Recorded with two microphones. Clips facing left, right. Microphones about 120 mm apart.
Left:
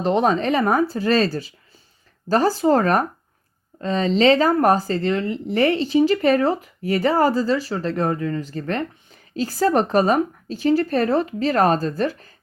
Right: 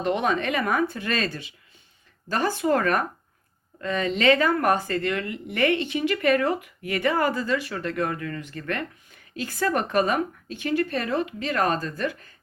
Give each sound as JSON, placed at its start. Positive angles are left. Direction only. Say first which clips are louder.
{"t": 0.0, "sound": "speech", "louder": "left 5 dB", "side_deg": 35}